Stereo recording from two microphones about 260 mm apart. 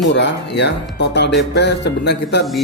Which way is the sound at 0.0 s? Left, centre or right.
Left.